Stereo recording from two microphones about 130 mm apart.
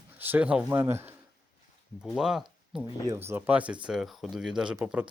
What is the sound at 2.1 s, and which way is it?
Speech, 5° right (ahead or behind).